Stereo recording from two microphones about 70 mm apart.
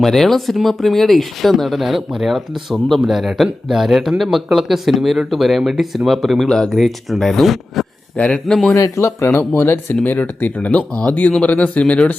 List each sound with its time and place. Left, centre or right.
0.0 s speech: centre
8.1 s a man's voice: centre
8.7 s speech: left; by 12.1 s centre